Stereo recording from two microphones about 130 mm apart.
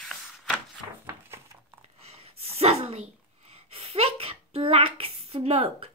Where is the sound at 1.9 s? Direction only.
50° right (ahead or behind).